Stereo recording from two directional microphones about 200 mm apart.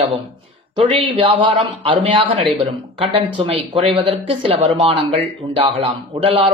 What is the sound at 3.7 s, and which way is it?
Speech, 30° right (ahead or behind).